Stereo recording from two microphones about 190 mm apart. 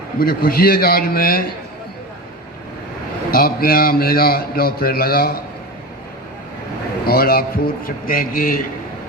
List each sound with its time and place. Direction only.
0.2 s a man's voice: 50° left (ahead or behind)
3.3 s a man's voice: 50° left (ahead or behind)
7.0 s a man's voice: 50° left (ahead or behind)